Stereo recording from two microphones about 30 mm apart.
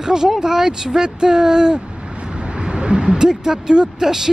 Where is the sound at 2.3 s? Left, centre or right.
Right.